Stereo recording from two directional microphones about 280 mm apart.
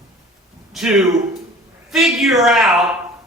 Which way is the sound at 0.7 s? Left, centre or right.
Centre.